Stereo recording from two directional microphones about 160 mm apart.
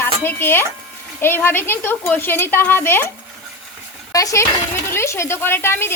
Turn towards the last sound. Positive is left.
turn(degrees=15)  # may be behind; listen again after turning